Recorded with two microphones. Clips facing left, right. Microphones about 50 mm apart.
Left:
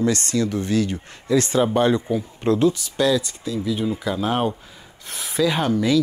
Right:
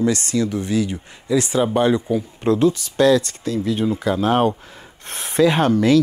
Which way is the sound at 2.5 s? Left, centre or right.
Right.